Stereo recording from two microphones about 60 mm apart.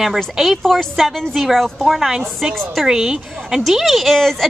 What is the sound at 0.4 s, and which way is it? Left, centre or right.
A woman's voice, centre.